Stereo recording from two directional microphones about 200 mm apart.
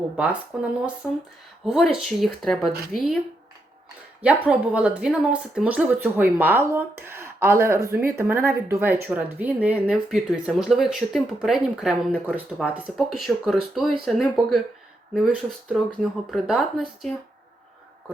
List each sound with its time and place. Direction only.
0.2 s speech: 5° right (ahead or behind)
4.2 s speech: 5° right (ahead or behind)